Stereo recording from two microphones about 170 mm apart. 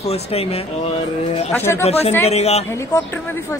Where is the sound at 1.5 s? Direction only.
15° left (ahead or behind).